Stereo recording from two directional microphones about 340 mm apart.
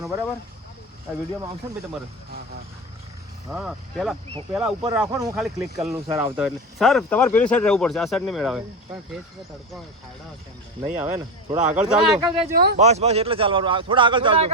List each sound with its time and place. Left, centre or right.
0.0 s speech: centre
3.5 s speech: centre
10.9 s a man's voice: centre
12.5 s a man's voice: right